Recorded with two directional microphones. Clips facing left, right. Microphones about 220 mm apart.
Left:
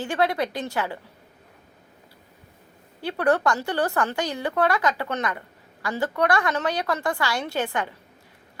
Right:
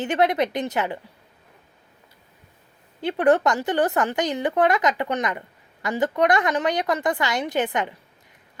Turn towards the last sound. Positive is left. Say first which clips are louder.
# right 3 dB
turn(degrees=-20)  # may be behind; listen again after turning